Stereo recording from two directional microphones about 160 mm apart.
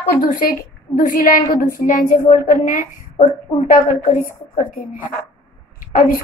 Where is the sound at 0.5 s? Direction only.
65° left (ahead or behind).